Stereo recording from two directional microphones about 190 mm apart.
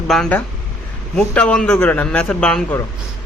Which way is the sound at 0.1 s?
5° left (ahead or behind).